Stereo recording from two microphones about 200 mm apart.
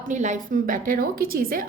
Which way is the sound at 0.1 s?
35° right (ahead or behind).